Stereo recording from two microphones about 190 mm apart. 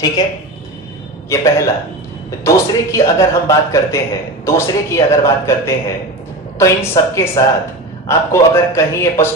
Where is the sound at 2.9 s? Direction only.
15° left (ahead or behind).